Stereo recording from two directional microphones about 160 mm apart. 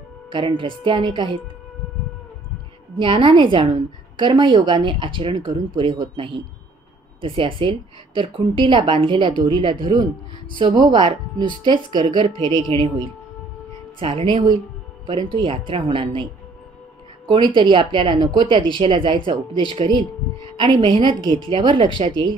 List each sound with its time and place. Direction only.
0.3 s speech: 30° right (ahead or behind)
3.0 s speech: 35° right (ahead or behind)
13.9 s speech: 35° right (ahead or behind)
17.3 s speech: 30° right (ahead or behind)